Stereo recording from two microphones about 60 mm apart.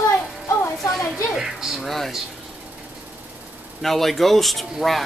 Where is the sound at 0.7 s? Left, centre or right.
Centre.